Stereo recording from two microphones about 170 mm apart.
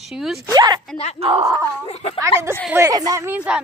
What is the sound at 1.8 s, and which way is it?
Speech, 40° left (ahead or behind).